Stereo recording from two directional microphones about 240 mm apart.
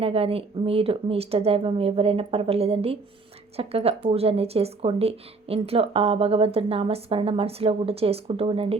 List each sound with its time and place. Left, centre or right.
0.0 s speech: right